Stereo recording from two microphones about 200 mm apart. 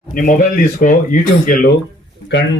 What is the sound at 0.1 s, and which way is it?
Speech, 45° left (ahead or behind).